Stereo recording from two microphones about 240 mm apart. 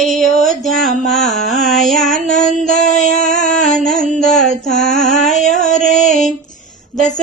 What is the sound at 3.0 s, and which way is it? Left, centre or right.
Music, left.